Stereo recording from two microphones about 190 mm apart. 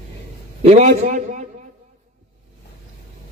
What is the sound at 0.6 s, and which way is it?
Speech, 40° right (ahead or behind).